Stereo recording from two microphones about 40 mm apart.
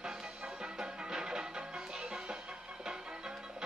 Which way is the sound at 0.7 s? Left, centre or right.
Centre.